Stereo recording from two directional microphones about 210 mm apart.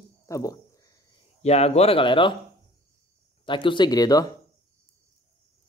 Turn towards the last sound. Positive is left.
turn(degrees=20)  # may be behind; listen again after turning